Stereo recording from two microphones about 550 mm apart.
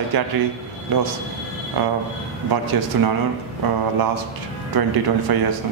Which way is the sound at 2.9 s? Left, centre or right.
Right.